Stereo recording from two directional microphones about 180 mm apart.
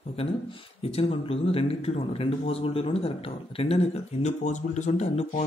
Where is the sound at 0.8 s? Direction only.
35° left (ahead or behind).